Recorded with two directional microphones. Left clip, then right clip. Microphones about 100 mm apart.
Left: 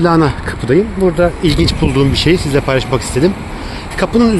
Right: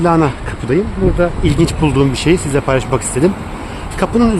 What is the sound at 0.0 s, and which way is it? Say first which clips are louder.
Speech: left 1 dB; 15° left (ahead or behind).